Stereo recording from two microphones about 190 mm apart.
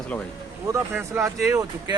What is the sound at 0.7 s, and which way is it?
Speech, 10° right (ahead or behind).